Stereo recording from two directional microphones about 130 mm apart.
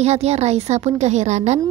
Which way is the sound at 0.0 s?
55° right (ahead or behind).